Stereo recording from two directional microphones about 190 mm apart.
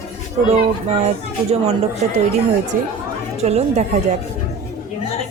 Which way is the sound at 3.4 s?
35° right (ahead or behind).